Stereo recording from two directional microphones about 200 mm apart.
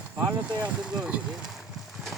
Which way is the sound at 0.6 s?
5° right (ahead or behind).